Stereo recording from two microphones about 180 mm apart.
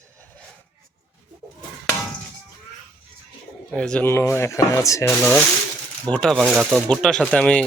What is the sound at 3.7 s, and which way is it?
Speech, 5° left (ahead or behind).